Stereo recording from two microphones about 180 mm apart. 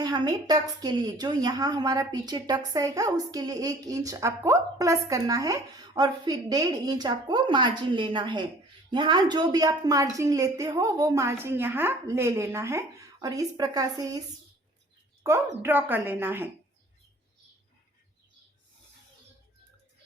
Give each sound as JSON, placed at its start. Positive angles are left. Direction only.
{"t": 0.0, "sound": "a woman's voice", "side_deg": -20}
{"t": 15.2, "sound": "speech", "side_deg": -15}